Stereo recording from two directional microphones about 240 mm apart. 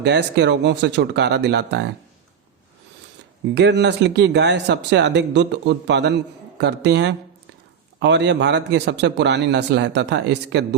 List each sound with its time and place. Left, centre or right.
0.0 s speech: right
3.5 s speech: right